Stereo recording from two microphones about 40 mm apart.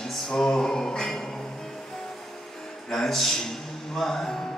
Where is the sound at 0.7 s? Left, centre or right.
Centre.